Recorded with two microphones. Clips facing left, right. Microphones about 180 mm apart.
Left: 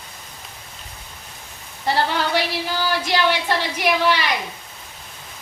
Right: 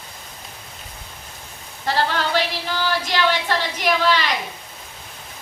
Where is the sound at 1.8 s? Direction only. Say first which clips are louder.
Left 1 dB; 15° left (ahead or behind).